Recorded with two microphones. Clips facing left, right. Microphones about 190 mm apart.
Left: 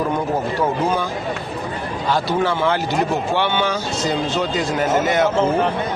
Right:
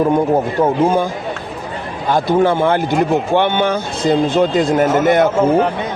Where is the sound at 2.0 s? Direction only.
50° right (ahead or behind).